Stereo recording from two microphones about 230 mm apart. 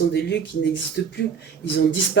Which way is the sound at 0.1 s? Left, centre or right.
Left.